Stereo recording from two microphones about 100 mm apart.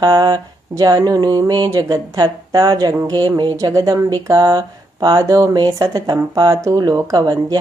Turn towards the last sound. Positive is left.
turn(degrees=-40)  # may be behind; listen again after turning